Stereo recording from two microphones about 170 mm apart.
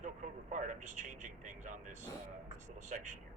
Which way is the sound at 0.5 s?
50° right (ahead or behind).